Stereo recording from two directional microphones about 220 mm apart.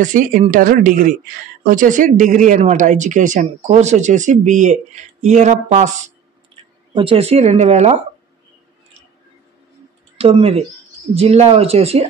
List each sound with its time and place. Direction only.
0.0 s speech: 35° right (ahead or behind)
10.1 s speech: 25° right (ahead or behind)